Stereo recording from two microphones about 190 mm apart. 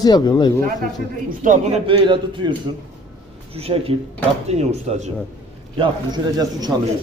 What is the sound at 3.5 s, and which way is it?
Speech, 30° right (ahead or behind).